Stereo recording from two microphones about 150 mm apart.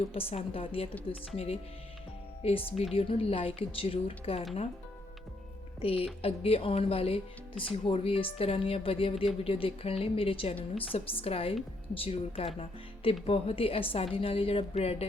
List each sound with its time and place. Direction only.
0.0 s speech: 40° left (ahead or behind)
2.4 s speech: 40° left (ahead or behind)
5.8 s speech: 40° left (ahead or behind)